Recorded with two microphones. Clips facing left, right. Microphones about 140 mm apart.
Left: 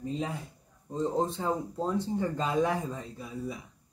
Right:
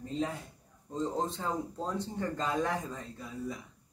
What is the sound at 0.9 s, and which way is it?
Speech, 15° left (ahead or behind).